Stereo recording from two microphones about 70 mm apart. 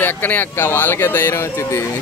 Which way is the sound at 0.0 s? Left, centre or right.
Left.